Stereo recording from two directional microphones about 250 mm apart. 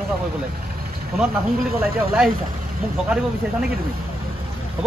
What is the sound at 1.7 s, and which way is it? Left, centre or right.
Speech, right.